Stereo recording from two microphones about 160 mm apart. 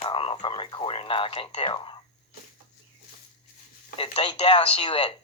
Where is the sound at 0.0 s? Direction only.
35° left (ahead or behind).